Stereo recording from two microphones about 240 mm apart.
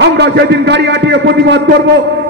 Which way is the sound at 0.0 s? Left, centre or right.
Right.